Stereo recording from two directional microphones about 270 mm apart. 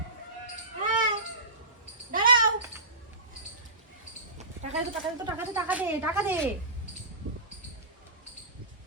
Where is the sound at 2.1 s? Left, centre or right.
Right.